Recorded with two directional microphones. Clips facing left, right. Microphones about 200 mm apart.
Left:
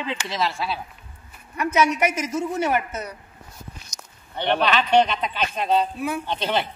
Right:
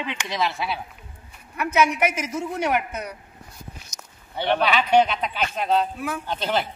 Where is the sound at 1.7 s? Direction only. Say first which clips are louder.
Even; 10° right (ahead or behind).